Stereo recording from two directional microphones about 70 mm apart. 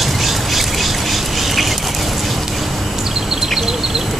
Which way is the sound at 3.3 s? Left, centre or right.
Centre.